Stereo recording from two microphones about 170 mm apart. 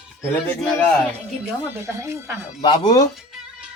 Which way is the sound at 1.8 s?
15° right (ahead or behind).